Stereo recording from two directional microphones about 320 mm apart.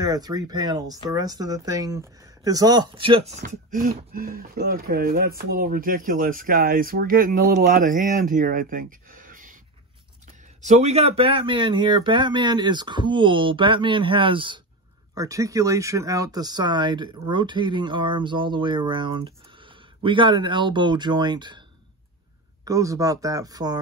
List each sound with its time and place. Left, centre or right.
0.0 s speech: centre
10.6 s speech: right
22.7 s speech: centre